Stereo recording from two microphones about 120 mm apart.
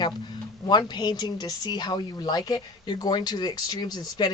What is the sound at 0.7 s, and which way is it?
Speech, 35° left (ahead or behind).